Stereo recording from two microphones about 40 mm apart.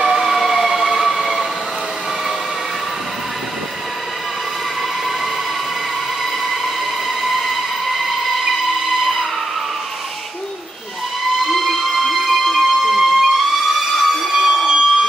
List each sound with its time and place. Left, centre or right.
0.0 s vehicle: centre
7.2 s train: centre
9.0 s vehicle: centre
11.4 s music: centre
13.7 s a sound: centre